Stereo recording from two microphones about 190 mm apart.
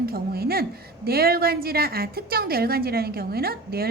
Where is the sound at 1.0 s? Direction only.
55° right (ahead or behind).